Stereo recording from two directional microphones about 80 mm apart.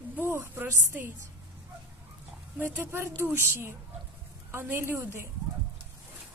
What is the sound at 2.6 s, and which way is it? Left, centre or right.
A woman's voice, right.